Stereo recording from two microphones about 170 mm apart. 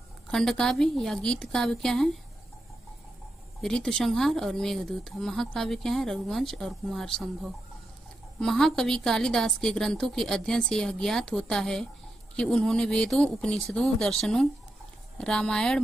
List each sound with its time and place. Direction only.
0.3 s speech: centre (ahead or behind)
3.6 s speech: centre (ahead or behind)